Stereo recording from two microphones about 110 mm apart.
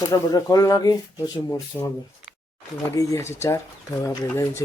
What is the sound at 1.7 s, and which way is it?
Speech, 15° left (ahead or behind).